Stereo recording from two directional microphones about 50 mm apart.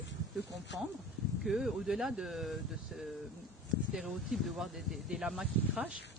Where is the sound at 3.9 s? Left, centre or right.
Centre.